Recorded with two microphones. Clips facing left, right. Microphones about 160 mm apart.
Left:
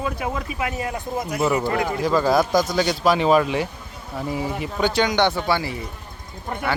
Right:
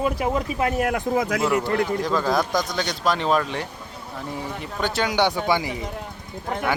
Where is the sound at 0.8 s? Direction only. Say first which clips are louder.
Right 5 dB; 80° right.